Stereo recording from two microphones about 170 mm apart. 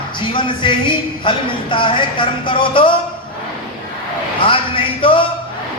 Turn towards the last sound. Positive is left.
turn(degrees=30)  # may be behind; listen again after turning